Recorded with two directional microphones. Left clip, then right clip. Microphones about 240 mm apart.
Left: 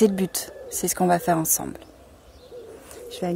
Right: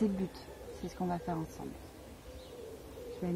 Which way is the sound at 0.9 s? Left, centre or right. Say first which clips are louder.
Left 17 dB; left.